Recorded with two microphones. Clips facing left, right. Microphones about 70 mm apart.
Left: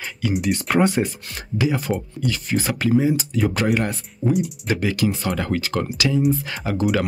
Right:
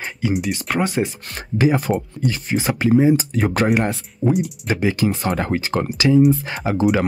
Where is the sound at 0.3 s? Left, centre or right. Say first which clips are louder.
Left 3 dB; centre.